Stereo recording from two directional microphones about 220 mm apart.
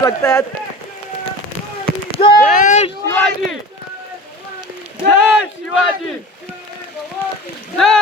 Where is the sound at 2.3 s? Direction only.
35° left (ahead or behind).